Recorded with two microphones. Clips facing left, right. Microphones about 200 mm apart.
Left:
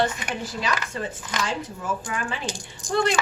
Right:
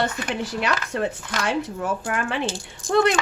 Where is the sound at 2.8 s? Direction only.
15° left (ahead or behind).